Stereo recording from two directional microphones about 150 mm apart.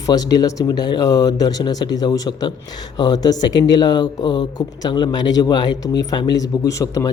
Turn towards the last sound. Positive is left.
turn(degrees=20)  # may be behind; listen again after turning